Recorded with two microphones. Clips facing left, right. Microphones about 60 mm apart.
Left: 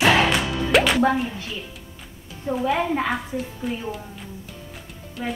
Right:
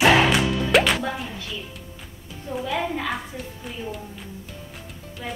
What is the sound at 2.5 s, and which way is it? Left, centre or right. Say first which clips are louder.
Speech: left 5 dB; left.